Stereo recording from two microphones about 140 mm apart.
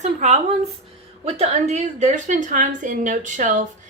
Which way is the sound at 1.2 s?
50° right (ahead or behind).